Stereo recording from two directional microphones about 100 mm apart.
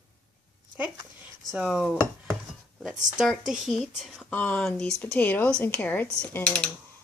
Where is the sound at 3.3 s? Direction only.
Centre (ahead or behind).